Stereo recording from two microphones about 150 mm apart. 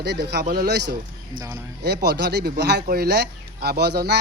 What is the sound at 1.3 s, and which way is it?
Speech, 25° right (ahead or behind).